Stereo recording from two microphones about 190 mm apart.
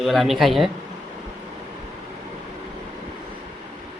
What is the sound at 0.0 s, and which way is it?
Speech, centre (ahead or behind).